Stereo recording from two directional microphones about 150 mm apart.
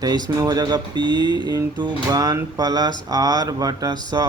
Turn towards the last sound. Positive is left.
turn(degrees=-25)  # may be behind; listen again after turning